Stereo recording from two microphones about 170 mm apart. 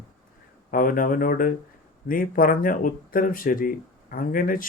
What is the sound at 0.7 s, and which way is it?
Speech, 55° left (ahead or behind).